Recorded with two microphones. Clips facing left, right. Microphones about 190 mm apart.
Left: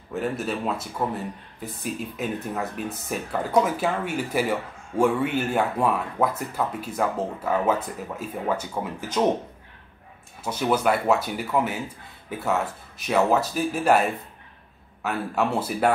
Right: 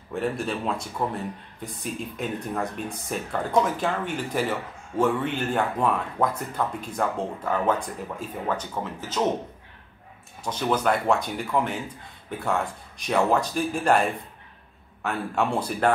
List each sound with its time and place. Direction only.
0.1 s speech: 5° left (ahead or behind)
10.4 s speech: 10° left (ahead or behind)